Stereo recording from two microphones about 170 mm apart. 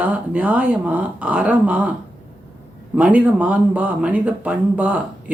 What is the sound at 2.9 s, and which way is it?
Speech, 10° right (ahead or behind).